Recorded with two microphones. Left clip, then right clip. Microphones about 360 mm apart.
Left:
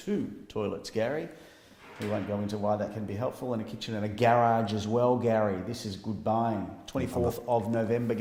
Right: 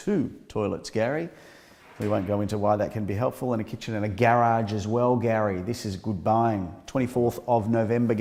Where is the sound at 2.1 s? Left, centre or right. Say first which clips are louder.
Right 6 dB; right.